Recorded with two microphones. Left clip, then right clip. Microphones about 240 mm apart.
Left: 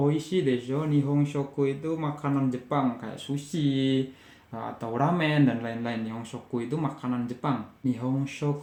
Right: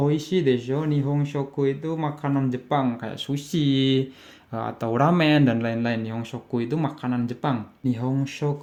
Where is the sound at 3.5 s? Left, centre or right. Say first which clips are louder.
Right 5 dB; right.